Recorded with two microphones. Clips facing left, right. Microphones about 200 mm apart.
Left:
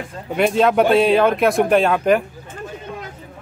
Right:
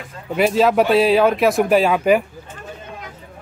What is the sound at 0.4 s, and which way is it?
A man's voice, centre (ahead or behind).